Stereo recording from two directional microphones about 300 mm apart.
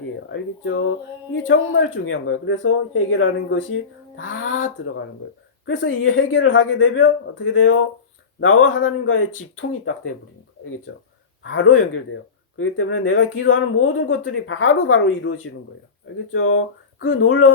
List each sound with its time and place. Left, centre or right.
0.3 s speech: left
5.6 s speech: left